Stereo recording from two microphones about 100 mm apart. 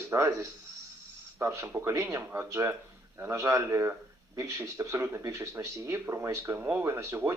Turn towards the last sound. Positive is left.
turn(degrees=-25)  # may be behind; listen again after turning